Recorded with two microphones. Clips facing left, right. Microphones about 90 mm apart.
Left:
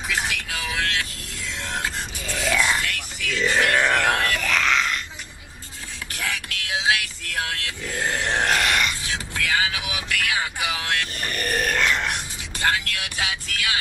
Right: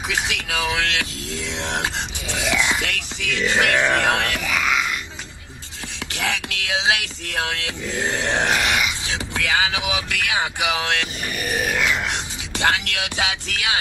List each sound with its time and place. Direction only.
0.1 s speech: 90° right
2.0 s speech: 20° right (ahead or behind)
2.8 s speech: 90° right
3.4 s speech: 20° right (ahead or behind)
4.4 s groan: 5° right (ahead or behind)
6.1 s music: 90° right
7.0 s speech: 90° right
7.9 s speech: 20° right (ahead or behind)
8.5 s a sound: 10° right (ahead or behind)
9.3 s vehicle: 90° right
9.8 s speech: 20° right (ahead or behind)
10.8 s speech: 90° right
11.3 s grunt: 5° right (ahead or behind)
12.5 s speech: 90° right